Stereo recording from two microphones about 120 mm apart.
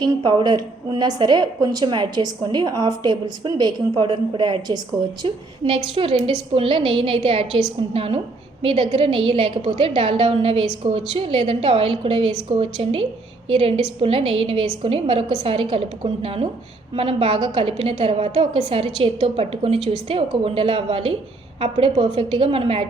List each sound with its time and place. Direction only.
0.0 s a woman's voice: 35° right (ahead or behind); by 22.9 s 50° right (ahead or behind)